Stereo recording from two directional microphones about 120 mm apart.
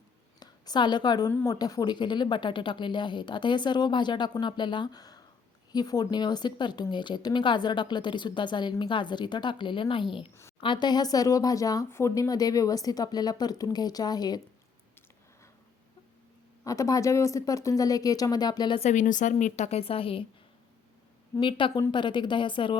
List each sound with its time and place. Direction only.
0.3 s a sound: 35° left (ahead or behind)
1.5 s a woman's voice: 30° left (ahead or behind)
16.6 s speech: 25° left (ahead or behind)
18.8 s a woman's voice: 80° left; by 20.2 s 50° left (ahead or behind)
21.3 s speech: 25° left (ahead or behind)
21.9 s a woman's voice: 40° left (ahead or behind)